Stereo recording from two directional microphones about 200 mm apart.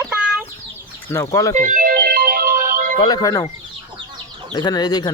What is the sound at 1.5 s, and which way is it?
Music, 40° right (ahead or behind).